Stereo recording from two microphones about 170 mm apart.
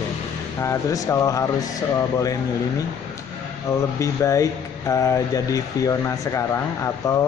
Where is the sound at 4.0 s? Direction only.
20° left (ahead or behind).